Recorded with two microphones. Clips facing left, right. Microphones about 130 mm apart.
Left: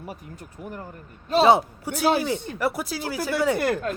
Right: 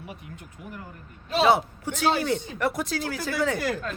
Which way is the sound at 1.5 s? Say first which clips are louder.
Left 2 dB; 15° left (ahead or behind).